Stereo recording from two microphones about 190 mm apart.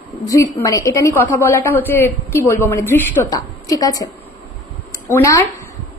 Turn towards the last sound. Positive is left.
turn(degrees=15)  # may be behind; listen again after turning